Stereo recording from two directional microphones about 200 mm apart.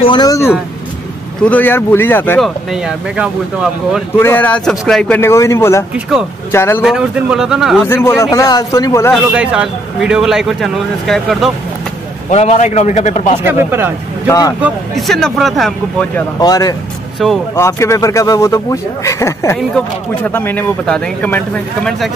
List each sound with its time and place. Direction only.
0.0 s vehicle: 20° left (ahead or behind)
1.4 s speech: 10° left (ahead or behind)
2.7 s speech: 5° right (ahead or behind)
4.2 s speech: 10° left (ahead or behind)
5.9 s speech: 5° right (ahead or behind)
6.5 s speech: 10° left (ahead or behind)
6.8 s speech: 5° right (ahead or behind)
7.8 s speech: 10° left (ahead or behind)
9.1 s speech: 5° right (ahead or behind)
12.3 s a man's voice: 35° left (ahead or behind)
13.4 s speech: 10° right (ahead or behind)
14.6 s speech: centre (ahead or behind)
16.3 s speech: 20° left (ahead or behind)